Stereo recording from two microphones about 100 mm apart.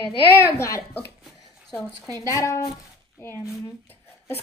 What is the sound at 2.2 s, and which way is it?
Speech, 35° left (ahead or behind).